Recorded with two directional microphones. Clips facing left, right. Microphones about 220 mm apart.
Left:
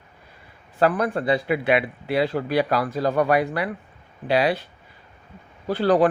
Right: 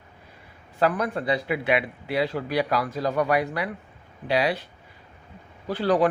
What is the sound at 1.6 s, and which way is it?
Speech, 30° left (ahead or behind).